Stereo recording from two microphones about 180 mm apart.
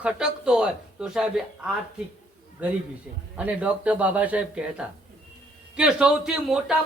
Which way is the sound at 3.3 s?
5° right (ahead or behind).